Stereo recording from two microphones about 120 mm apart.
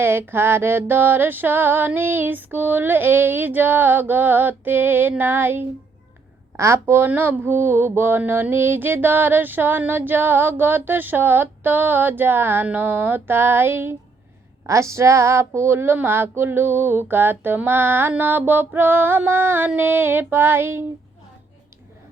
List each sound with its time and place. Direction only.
0.0 s mantra: 20° right (ahead or behind)